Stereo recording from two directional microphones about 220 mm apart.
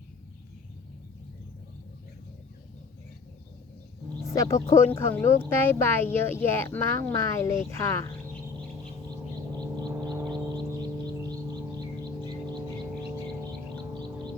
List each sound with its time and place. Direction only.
4.3 s speech: 15° left (ahead or behind)
4.6 s speech: 30° left (ahead or behind)
4.9 s speech: 10° left (ahead or behind)
9.6 s music: 20° right (ahead or behind)